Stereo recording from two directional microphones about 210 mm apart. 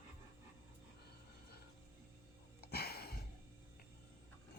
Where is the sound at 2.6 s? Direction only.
50° left (ahead or behind).